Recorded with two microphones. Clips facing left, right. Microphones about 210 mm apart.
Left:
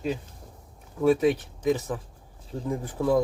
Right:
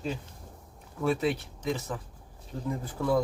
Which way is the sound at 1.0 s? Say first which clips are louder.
Left 6 dB; 15° left (ahead or behind).